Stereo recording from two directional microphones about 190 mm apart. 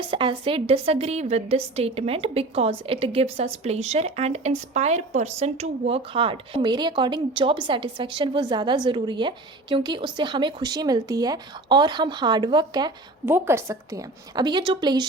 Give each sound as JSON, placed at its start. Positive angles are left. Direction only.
{"t": 0.1, "sound": "a woman's voice", "side_deg": -25}
{"t": 13.2, "sound": "a woman's voice", "side_deg": -10}